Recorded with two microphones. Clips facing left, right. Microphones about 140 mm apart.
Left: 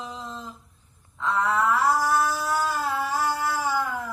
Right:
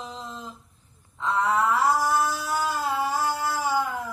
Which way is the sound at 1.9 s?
25° right (ahead or behind).